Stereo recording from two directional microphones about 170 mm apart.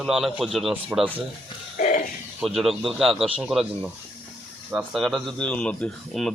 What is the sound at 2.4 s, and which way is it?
Speech, centre (ahead or behind).